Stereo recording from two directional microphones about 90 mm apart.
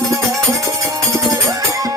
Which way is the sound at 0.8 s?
40° right (ahead or behind).